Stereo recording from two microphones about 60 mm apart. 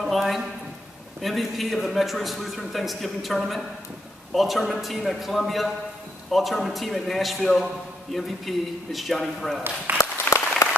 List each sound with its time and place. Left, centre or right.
0.0 s a sound: centre
1.2 s a man's voice: centre
9.9 s applause: right
10.3 s applause: left